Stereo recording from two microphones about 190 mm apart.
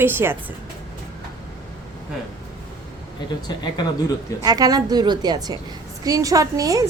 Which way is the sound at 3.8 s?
20° left (ahead or behind).